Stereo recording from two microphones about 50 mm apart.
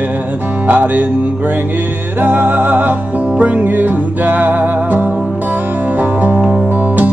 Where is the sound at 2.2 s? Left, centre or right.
Right.